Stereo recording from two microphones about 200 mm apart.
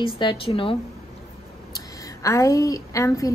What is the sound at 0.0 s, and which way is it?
Speech, 25° left (ahead or behind).